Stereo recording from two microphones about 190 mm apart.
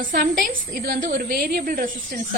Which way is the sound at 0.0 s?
45° right (ahead or behind).